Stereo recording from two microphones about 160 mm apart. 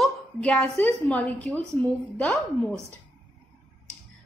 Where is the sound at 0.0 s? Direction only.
5° left (ahead or behind).